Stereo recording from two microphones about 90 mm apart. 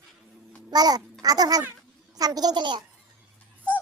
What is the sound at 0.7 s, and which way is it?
Babbling, 45° right (ahead or behind).